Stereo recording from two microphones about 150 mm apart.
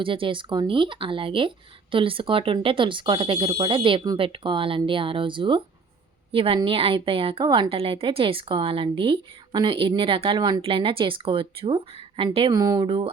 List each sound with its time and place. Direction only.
0.0 s a woman's voice: 35° right (ahead or behind)